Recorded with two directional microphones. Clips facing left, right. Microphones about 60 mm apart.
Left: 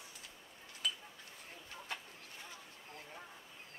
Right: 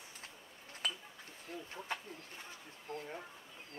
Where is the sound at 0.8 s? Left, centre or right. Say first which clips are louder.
Even; right.